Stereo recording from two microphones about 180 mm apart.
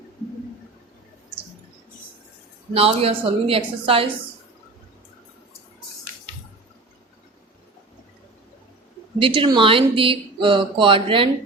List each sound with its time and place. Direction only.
2.7 s a woman's voice: 30° right (ahead or behind)
9.1 s speech: 30° right (ahead or behind)